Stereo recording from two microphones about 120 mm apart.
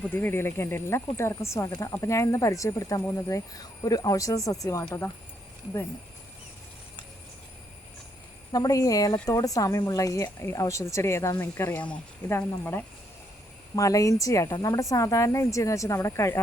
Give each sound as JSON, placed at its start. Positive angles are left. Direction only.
{"t": 0.0, "sound": "speech", "side_deg": 15}
{"t": 8.5, "sound": "speech", "side_deg": 30}